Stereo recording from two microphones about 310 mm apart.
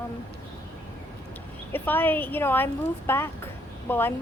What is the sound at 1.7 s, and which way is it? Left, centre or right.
A woman's voice, centre.